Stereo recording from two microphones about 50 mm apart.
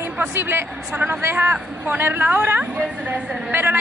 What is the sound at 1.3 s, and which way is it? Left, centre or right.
A woman's voice, right.